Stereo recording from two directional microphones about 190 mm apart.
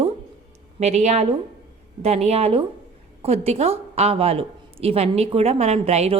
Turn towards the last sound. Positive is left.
turn(degrees=-35)  # may be behind; listen again after turning